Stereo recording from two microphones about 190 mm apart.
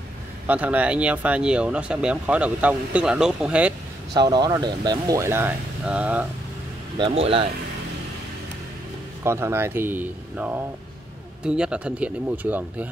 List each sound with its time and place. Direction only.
0.5 s speech: 10° right (ahead or behind)
4.1 s speech: 25° right (ahead or behind); by 6.2 s 5° right (ahead or behind)
7.0 s speech: 30° right (ahead or behind)
9.2 s speech: 15° right (ahead or behind)